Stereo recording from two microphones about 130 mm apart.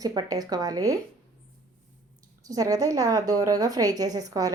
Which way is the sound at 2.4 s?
25° right (ahead or behind).